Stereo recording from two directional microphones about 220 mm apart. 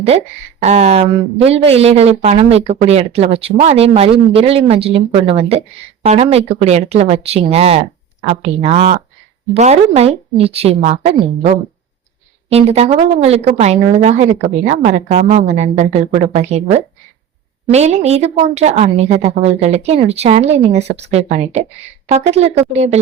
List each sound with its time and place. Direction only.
0.6 s a woman's voice: 30° right (ahead or behind)